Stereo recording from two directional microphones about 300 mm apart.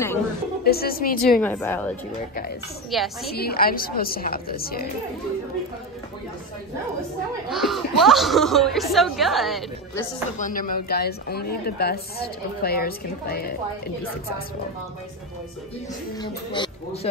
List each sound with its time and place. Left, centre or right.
0.7 s a woman's voice: left
1.4 s a woman's voice: centre
3.3 s a woman's voice: left
7.4 s a woman's voice: centre
10.4 s a woman's voice: left
16.2 s speech: centre